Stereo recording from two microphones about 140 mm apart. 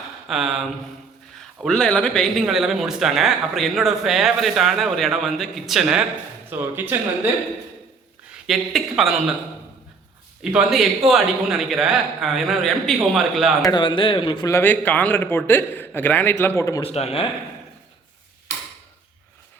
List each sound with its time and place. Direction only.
0.3 s speech: 5° right (ahead or behind)
6.5 s speech: 15° right (ahead or behind)
8.4 s speech: centre (ahead or behind)
10.4 s speech: 5° right (ahead or behind)
13.6 s a man's voice: 30° left (ahead or behind)
14.5 s a man's voice: 15° left (ahead or behind)
16.8 s speech: 45° left (ahead or behind)